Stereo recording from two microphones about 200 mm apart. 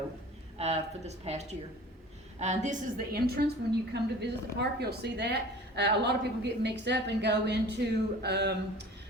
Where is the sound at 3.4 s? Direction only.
50° right (ahead or behind).